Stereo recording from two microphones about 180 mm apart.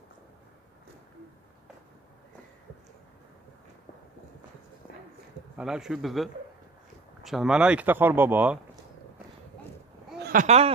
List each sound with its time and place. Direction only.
5.6 s speech: 5° right (ahead or behind)
10.1 s a sound: 60° right (ahead or behind)
10.4 s speech: 35° right (ahead or behind)